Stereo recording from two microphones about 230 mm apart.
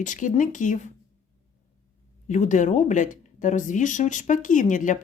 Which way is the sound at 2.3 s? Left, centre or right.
Left.